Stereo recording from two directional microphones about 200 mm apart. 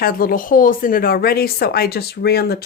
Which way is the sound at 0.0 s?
45° left (ahead or behind).